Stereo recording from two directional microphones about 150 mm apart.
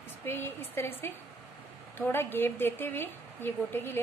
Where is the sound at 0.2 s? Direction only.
15° left (ahead or behind).